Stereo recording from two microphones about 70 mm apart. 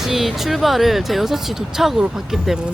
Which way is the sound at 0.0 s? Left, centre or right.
Centre.